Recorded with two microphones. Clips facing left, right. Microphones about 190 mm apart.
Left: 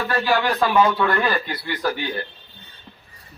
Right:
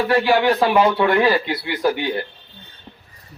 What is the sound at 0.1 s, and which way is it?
Speech, 20° right (ahead or behind).